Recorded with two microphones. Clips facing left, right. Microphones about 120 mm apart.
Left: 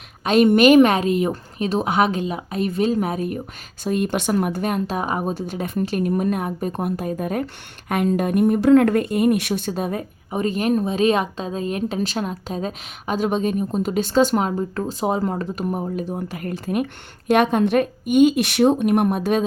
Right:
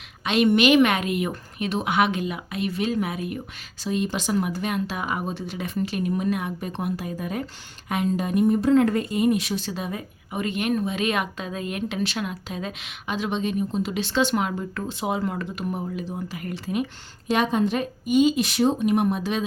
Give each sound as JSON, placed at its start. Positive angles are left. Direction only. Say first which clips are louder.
{"t": 0.3, "sound": "a woman's voice", "louder": "left 5 dB", "side_deg": 45}
{"t": 3.8, "sound": "speech", "louder": "left 4 dB", "side_deg": 55}